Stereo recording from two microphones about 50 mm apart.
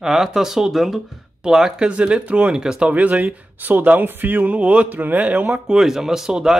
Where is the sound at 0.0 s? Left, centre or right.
Centre.